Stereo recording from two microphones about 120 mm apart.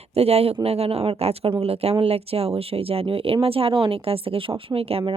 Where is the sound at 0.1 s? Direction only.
60° right (ahead or behind).